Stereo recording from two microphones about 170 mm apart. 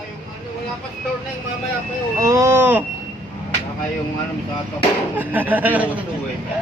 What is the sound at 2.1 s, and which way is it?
Speech, 15° right (ahead or behind).